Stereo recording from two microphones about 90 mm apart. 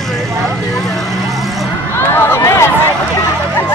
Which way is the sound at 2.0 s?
25° left (ahead or behind).